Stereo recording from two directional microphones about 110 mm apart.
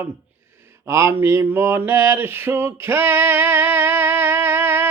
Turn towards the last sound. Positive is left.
turn(degrees=-20)  # may be behind; listen again after turning